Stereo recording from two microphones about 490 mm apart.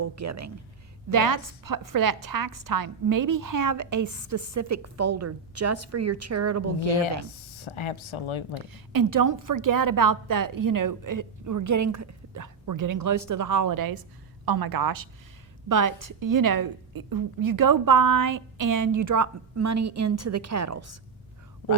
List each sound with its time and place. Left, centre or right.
0.0 s a woman's voice: right
7.5 s speech: left
8.7 s a woman's voice: right